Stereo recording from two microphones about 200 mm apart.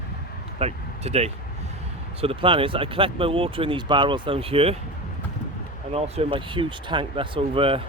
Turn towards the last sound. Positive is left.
turn(degrees=-25)  # may be behind; listen again after turning